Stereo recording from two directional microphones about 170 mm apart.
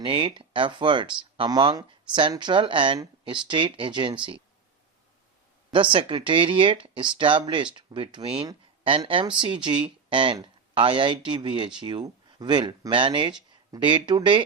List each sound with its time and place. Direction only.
0.0 s speech: 30° right (ahead or behind)
5.7 s speech: 30° right (ahead or behind)